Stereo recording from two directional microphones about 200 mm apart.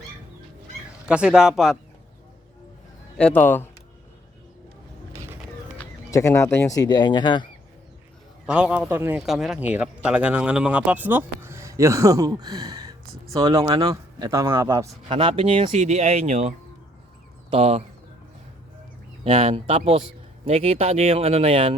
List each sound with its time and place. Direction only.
1.0 s speech: 5° right (ahead or behind)
3.2 s speech: 5° left (ahead or behind)
6.1 s speech: 15° left (ahead or behind)
8.4 s speech: 5° right (ahead or behind); by 17.8 s 30° right (ahead or behind)
19.2 s speech: 30° right (ahead or behind)